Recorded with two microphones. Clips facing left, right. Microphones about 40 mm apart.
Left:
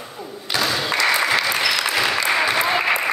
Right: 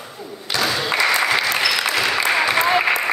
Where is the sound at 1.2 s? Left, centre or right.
Centre.